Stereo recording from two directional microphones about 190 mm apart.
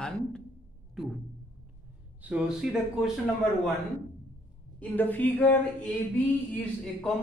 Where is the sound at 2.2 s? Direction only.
5° right (ahead or behind).